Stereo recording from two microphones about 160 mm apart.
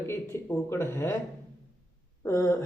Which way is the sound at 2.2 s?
20° left (ahead or behind).